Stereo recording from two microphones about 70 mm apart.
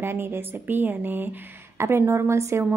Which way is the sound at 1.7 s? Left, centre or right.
Right.